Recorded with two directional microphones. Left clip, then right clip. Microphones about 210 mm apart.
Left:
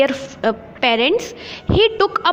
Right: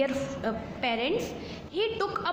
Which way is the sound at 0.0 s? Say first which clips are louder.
Left 12 dB; 40° left (ahead or behind).